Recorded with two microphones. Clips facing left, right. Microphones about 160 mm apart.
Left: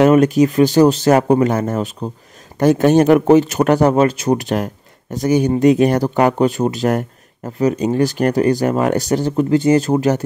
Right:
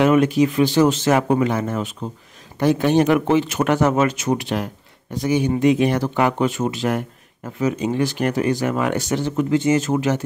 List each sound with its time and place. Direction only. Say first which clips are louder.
0.0 s speech: left 4 dB; 40° left (ahead or behind)